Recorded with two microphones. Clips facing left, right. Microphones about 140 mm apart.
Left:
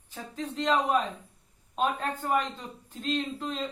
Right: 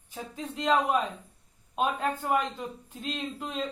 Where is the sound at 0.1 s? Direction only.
10° right (ahead or behind).